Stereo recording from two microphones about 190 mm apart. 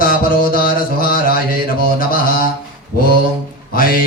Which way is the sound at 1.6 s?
50° left (ahead or behind).